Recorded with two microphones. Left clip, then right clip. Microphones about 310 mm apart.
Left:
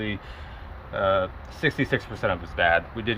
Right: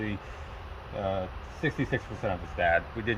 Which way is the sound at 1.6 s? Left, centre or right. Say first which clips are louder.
Left 6 dB; left.